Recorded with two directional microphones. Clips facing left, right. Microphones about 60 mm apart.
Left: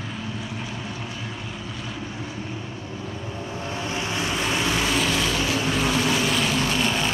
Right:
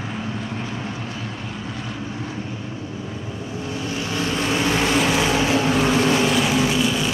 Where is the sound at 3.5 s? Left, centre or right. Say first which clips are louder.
Right 2 dB; left.